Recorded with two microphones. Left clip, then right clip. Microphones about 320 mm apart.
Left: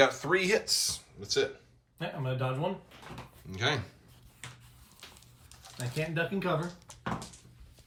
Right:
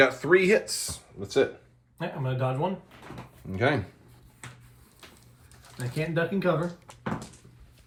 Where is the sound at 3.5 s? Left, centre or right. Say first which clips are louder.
Right 5 dB; centre.